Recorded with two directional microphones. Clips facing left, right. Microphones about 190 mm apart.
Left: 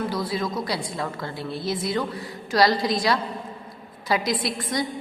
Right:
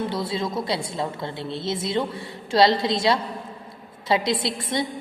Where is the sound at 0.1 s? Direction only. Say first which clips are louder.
Even; 25° right (ahead or behind).